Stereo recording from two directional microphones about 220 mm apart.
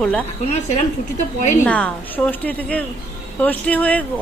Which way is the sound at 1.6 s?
5° left (ahead or behind).